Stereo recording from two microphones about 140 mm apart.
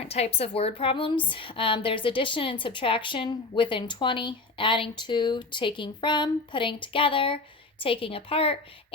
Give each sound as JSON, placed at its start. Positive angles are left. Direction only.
{"t": 0.1, "sound": "a woman's voice", "side_deg": 45}